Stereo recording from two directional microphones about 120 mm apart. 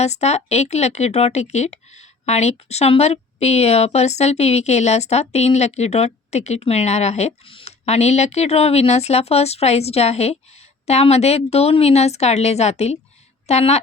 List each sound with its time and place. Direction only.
0.0 s speech: 65° left (ahead or behind)